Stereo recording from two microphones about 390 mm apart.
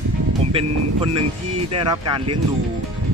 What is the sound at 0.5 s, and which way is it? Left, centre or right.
Speech, centre.